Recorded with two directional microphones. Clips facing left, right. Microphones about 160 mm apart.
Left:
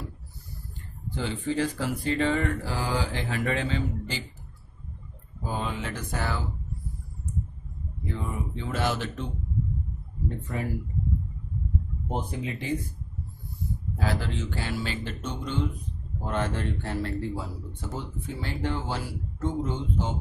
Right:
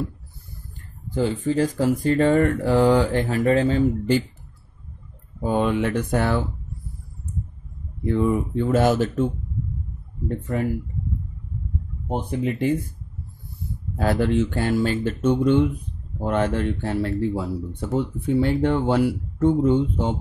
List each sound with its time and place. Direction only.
1.1 s speech: 40° right (ahead or behind)
5.4 s speech: 65° right (ahead or behind)
8.0 s speech: 60° right (ahead or behind); by 9.3 s 45° right (ahead or behind)
10.2 s speech: 60° right (ahead or behind)
12.1 s speech: 60° right (ahead or behind)
13.9 s speech: 60° right (ahead or behind)